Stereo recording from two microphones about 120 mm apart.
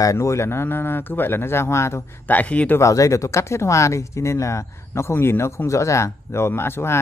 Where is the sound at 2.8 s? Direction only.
25° left (ahead or behind).